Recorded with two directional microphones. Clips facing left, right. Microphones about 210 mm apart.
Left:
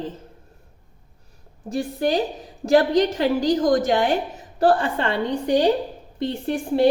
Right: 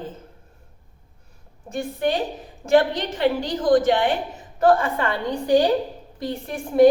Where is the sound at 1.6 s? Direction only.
35° left (ahead or behind).